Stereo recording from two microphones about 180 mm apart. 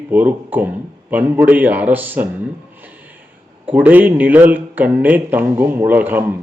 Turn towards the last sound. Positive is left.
turn(degrees=-10)  # may be behind; listen again after turning